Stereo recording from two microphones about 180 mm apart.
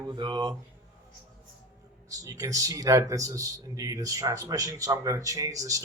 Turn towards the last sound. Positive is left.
turn(degrees=-20)  # may be behind; listen again after turning